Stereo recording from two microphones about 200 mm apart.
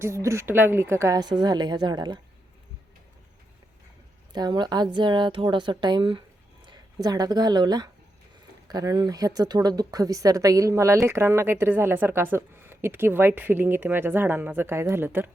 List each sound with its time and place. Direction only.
0.0 s speech: 15° right (ahead or behind)
4.3 s a woman's voice: 20° right (ahead or behind)